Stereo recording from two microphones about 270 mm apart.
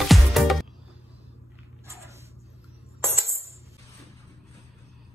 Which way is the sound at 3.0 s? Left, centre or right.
Centre.